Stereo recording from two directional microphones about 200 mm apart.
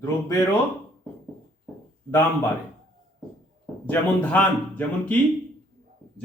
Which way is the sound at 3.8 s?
10° left (ahead or behind).